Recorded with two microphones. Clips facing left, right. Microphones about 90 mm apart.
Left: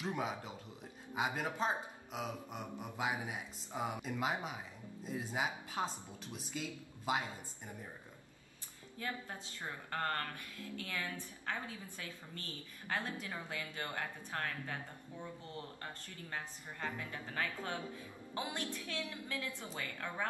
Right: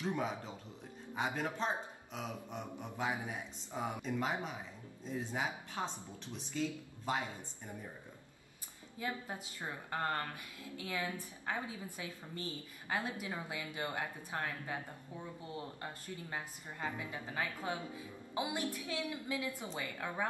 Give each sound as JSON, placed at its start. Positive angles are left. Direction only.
{"t": 0.0, "sound": "speech", "side_deg": 10}
{"t": 8.9, "sound": "a woman's voice", "side_deg": -15}